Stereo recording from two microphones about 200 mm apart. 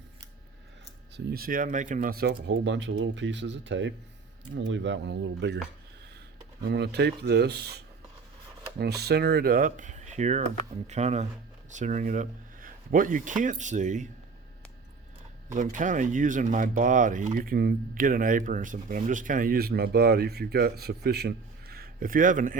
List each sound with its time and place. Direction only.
1.1 s speech: 50° right (ahead or behind)
6.6 s speech: 55° right (ahead or behind)
8.8 s speech: 55° right (ahead or behind); by 14.1 s 40° right (ahead or behind)
15.5 s speech: 40° right (ahead or behind)